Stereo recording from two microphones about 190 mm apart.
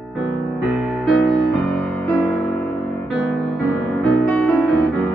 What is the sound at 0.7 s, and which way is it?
Music, centre (ahead or behind).